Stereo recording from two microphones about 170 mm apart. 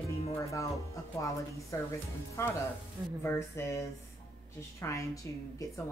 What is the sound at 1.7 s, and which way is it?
A woman's voice, 20° left (ahead or behind).